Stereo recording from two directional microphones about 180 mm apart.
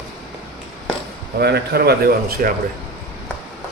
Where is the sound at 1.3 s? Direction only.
65° right (ahead or behind).